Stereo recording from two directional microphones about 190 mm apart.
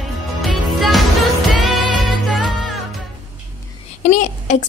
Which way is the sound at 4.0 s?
40° left (ahead or behind).